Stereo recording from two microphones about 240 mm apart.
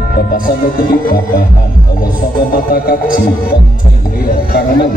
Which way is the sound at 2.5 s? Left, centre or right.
Left.